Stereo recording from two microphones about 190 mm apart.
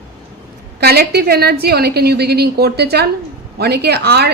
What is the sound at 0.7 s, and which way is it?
Speech, 55° right (ahead or behind).